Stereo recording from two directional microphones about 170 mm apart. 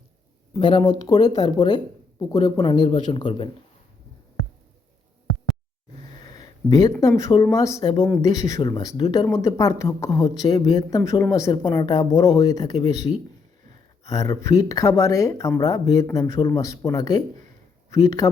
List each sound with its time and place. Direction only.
0.5 s speech: 25° left (ahead or behind)
6.3 s a sound: 20° left (ahead or behind)
7.0 s speech: 20° left (ahead or behind)
14.1 s speech: 20° left (ahead or behind)